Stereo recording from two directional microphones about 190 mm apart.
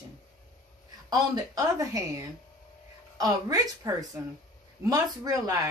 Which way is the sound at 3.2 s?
20° right (ahead or behind).